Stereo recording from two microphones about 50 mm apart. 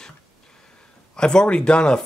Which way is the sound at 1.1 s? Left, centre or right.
Centre.